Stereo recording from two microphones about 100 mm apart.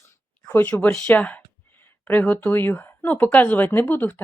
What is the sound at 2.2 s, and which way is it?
Speech, 10° left (ahead or behind).